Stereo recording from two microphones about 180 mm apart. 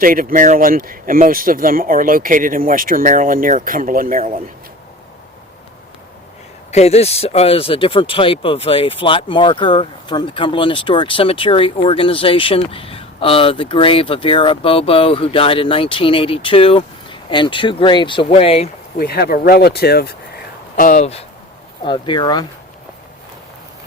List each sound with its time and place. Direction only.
0.0 s speech: 50° right (ahead or behind)
6.7 s speech: 35° left (ahead or behind)
18.9 s speech: 60° left (ahead or behind)
20.7 s speech: 45° left (ahead or behind); by 22.4 s 25° left (ahead or behind)